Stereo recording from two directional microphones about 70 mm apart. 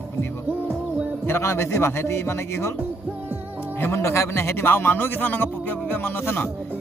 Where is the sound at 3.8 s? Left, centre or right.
Left.